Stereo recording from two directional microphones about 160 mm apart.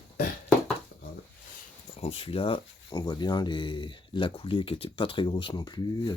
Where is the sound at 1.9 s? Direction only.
35° left (ahead or behind).